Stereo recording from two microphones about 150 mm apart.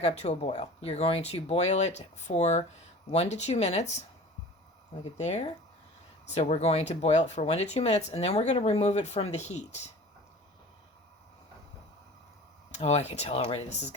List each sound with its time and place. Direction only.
0.0 s speech: 45° left (ahead or behind)
5.1 s speech: 50° left (ahead or behind)
12.7 s speech: 45° left (ahead or behind)